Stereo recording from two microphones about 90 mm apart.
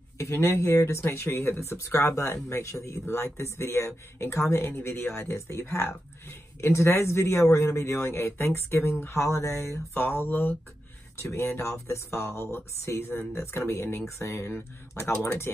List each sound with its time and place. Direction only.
0.2 s speech: 30° left (ahead or behind)